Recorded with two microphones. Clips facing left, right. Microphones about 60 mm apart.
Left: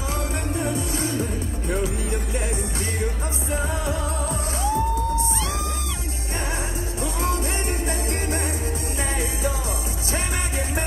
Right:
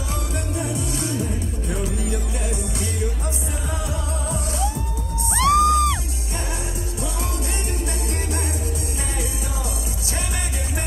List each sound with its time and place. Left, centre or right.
3.8 s music: left
5.3 s music: right